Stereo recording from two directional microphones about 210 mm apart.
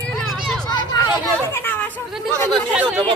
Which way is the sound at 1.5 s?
10° left (ahead or behind).